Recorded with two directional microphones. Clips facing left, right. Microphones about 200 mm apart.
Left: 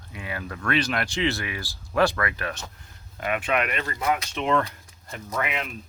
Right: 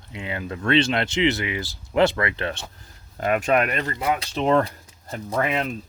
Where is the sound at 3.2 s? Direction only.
40° right (ahead or behind).